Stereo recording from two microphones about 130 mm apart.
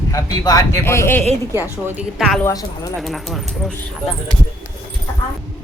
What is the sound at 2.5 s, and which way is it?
Speech, 30° left (ahead or behind).